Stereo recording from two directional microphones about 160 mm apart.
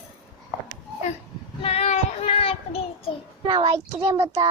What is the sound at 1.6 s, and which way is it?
Child singing, 40° left (ahead or behind).